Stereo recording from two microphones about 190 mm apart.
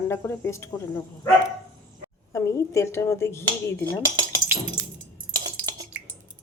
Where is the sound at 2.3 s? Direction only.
15° left (ahead or behind).